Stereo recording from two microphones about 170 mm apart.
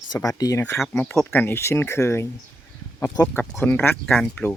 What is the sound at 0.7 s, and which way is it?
Speech, 5° left (ahead or behind).